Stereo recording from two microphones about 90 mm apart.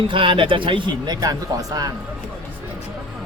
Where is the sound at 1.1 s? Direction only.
45° right (ahead or behind).